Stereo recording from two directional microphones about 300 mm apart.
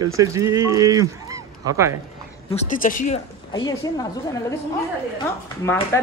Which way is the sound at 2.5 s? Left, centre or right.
Left.